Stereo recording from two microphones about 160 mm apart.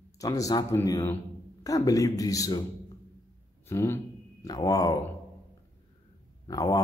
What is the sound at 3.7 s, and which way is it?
A man's voice, 15° left (ahead or behind).